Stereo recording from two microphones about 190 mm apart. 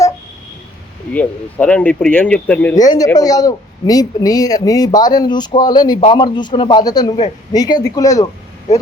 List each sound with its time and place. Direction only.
1.1 s speech: 5° left (ahead or behind)
2.7 s speech: 20° left (ahead or behind)